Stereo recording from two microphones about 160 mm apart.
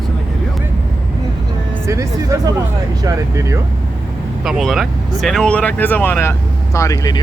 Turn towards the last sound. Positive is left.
turn(degrees=25)  # may be behind; listen again after turning